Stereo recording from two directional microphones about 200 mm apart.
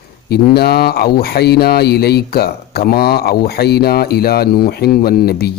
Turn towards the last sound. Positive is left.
turn(degrees=50)  # may be behind; listen again after turning